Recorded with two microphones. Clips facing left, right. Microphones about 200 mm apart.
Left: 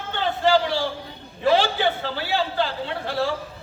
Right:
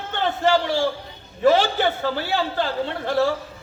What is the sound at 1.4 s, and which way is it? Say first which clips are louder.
A woman's voice: right 2 dB; 45° right (ahead or behind).